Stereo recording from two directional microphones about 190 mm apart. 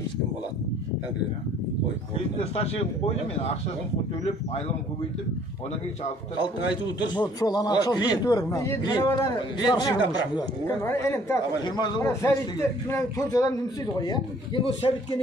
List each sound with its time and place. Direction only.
6.4 s a man's voice: 25° left (ahead or behind)